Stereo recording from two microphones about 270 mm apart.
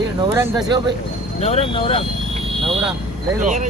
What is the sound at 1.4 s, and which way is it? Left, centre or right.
Speech, left.